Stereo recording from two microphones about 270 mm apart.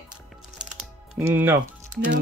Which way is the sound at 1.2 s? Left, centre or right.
Centre.